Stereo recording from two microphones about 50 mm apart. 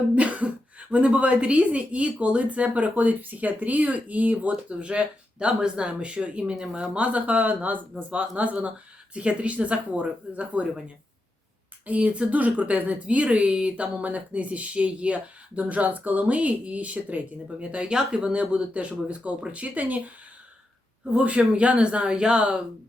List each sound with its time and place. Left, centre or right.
0.2 s speech: right
11.9 s speech: right